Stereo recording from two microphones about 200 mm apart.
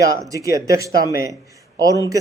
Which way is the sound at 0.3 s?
15° right (ahead or behind).